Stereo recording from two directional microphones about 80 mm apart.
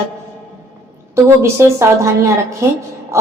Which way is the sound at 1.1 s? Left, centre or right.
Right.